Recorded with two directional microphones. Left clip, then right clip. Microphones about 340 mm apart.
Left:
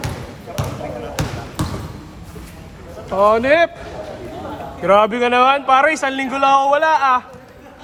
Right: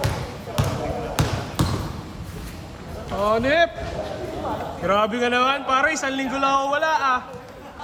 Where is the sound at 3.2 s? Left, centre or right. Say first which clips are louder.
Left 6 dB; centre.